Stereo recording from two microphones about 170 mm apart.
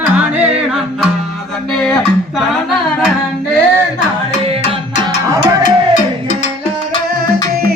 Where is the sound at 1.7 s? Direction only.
5° left (ahead or behind).